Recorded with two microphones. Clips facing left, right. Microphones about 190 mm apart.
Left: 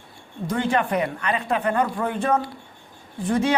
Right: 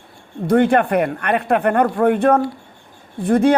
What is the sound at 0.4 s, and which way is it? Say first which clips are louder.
A man's voice: right 9 dB; 60° right (ahead or behind).